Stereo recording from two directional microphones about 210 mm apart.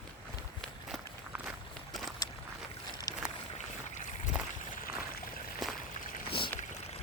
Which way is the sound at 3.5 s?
35° left (ahead or behind).